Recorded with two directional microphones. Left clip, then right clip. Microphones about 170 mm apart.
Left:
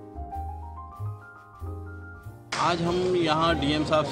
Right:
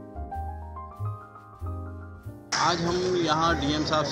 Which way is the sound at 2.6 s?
10° left (ahead or behind).